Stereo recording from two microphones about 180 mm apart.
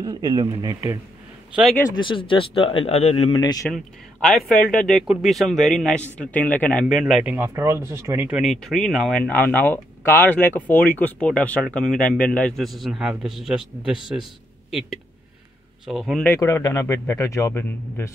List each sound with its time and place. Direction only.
0.0 s speech: 25° right (ahead or behind)
1.5 s speech: centre (ahead or behind)
2.0 s speech: 30° left (ahead or behind)
3.7 s a man's voice: 5° left (ahead or behind)
7.3 s speech: 15° right (ahead or behind); by 16.3 s centre (ahead or behind)
16.3 s a man's voice: 15° left (ahead or behind)